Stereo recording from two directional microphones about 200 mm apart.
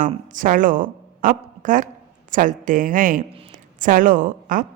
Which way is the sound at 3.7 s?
40° right (ahead or behind).